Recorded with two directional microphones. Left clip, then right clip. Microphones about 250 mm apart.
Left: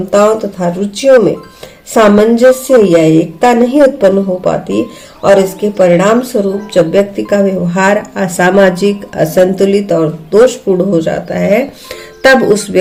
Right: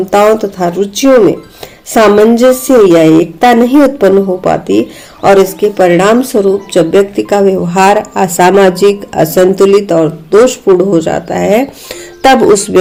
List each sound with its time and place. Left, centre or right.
0.1 s a woman's voice: right